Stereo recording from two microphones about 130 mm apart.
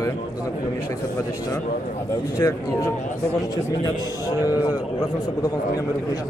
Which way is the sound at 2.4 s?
25° left (ahead or behind).